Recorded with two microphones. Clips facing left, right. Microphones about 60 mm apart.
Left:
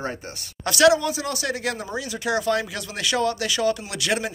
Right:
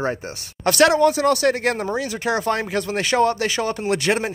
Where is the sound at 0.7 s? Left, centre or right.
Right.